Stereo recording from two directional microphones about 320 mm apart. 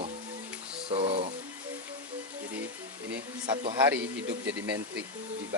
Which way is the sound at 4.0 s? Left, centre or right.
Right.